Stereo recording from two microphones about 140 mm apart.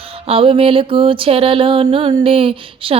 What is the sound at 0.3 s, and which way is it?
Music, 40° right (ahead or behind).